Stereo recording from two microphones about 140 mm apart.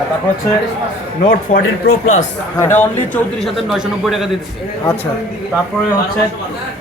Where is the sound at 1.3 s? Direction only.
80° left.